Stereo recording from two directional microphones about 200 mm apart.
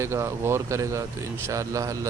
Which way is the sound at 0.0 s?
15° right (ahead or behind).